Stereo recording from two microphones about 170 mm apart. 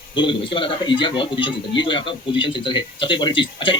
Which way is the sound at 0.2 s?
30° left (ahead or behind).